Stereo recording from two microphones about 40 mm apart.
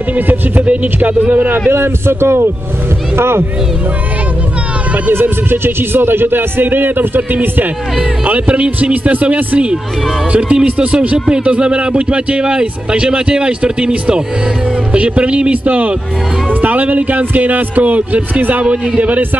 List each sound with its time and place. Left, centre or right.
0.3 s speech: right
1.7 s speech: right
5.1 s a man's voice: right
8.3 s a man's voice: right
14.9 s a man's voice: right